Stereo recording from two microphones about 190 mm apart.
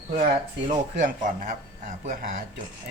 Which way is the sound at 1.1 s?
45° right (ahead or behind).